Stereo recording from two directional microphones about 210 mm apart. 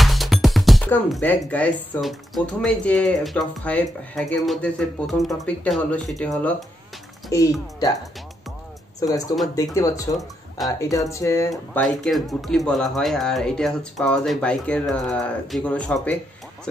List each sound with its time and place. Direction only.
0.0 s speech: centre (ahead or behind)
7.2 s speech: 15° left (ahead or behind)
9.6 s speech: 15° left (ahead or behind)
11.5 s speech: centre (ahead or behind)